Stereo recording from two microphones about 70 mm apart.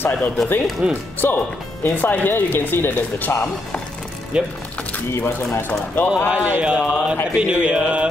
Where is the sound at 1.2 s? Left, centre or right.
Left.